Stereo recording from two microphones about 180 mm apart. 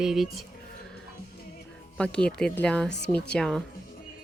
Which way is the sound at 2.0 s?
5° left (ahead or behind).